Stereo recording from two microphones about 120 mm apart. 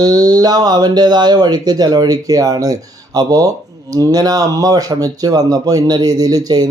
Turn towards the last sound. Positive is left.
turn(degrees=-35)  # may be behind; listen again after turning